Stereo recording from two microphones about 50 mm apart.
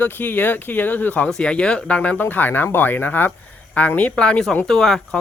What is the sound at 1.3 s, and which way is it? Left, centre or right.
Speech, centre.